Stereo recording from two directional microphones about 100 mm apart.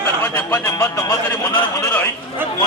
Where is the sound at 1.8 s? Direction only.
20° left (ahead or behind).